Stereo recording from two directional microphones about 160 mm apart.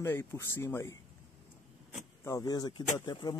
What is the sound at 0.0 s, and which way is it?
Speech, 15° left (ahead or behind).